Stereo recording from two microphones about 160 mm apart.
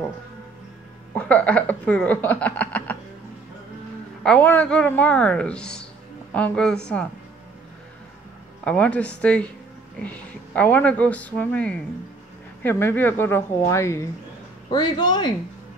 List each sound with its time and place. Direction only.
1.1 s speech: 10° left (ahead or behind)
4.2 s a woman's voice: 10° left (ahead or behind)
8.6 s speech: 10° left (ahead or behind); by 15.3 s 25° left (ahead or behind)